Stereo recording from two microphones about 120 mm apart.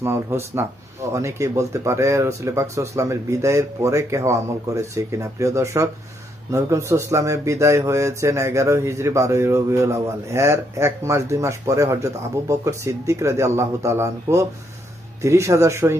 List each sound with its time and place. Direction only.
0.0 s speech: 20° right (ahead or behind)